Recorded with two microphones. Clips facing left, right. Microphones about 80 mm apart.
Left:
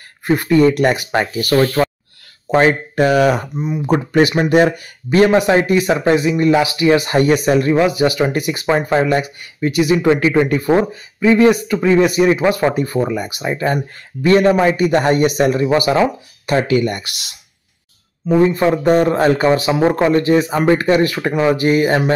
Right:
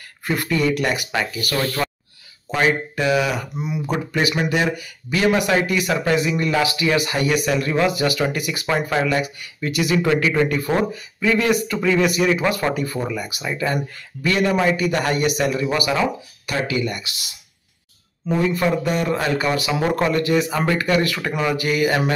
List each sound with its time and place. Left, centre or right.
0.2 s speech: left
2.5 s speech: left
18.4 s speech: left